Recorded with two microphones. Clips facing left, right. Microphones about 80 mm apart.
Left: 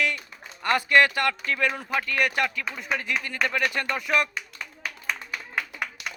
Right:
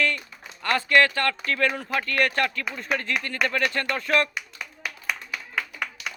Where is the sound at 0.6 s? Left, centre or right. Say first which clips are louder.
Even; centre.